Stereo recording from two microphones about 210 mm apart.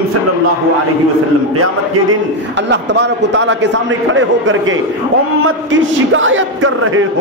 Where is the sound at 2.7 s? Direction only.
55° right (ahead or behind).